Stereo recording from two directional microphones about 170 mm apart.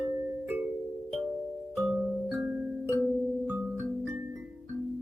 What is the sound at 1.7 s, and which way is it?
Music, centre (ahead or behind).